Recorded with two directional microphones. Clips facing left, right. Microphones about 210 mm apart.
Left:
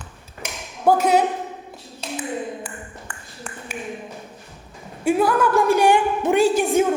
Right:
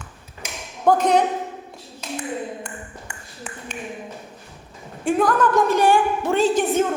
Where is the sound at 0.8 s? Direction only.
10° left (ahead or behind).